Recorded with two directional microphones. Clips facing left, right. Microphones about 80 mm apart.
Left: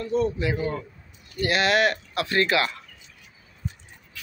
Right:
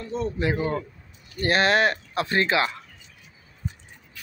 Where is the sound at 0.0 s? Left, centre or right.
Right.